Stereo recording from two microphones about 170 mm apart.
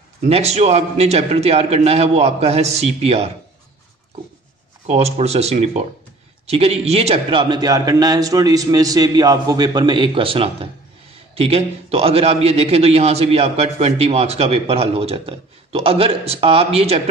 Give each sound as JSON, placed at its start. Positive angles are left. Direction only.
{"t": 0.2, "sound": "a man's voice", "side_deg": -40}
{"t": 4.8, "sound": "a man's voice", "side_deg": -40}